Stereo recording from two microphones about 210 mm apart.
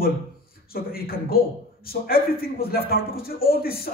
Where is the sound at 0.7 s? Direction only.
45° left (ahead or behind).